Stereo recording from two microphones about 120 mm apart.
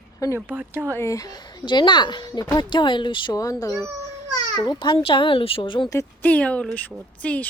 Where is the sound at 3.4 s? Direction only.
30° left (ahead or behind).